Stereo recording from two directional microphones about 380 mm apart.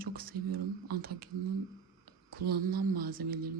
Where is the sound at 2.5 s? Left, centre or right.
Right.